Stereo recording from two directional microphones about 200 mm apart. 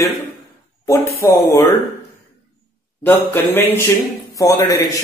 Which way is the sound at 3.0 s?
10° left (ahead or behind).